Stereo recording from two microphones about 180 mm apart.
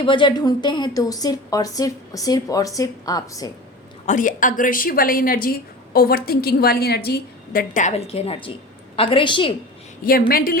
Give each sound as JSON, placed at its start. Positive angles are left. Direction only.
{"t": 0.0, "sound": "a woman's voice", "side_deg": 25}
{"t": 4.0, "sound": "a woman's voice", "side_deg": 45}
{"t": 7.7, "sound": "a woman's voice", "side_deg": 40}
{"t": 10.0, "sound": "a woman's voice", "side_deg": 55}